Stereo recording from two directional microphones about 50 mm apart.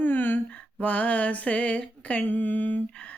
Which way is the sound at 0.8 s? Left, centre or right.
Left.